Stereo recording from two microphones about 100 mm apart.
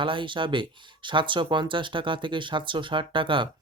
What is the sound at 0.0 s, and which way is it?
Speech, 55° right (ahead or behind).